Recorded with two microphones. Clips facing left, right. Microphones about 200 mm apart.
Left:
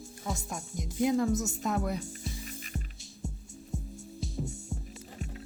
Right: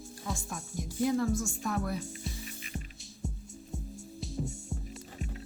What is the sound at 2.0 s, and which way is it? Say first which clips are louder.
Music: even; centre (ahead or behind).